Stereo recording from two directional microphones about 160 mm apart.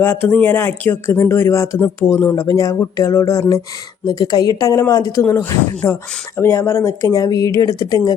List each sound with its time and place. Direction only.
0.0 s speech: 15° left (ahead or behind)